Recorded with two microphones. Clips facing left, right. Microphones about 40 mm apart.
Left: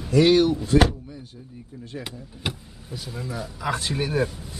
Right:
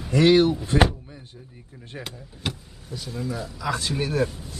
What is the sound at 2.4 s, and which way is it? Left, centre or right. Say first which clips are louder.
Speech: even; centre.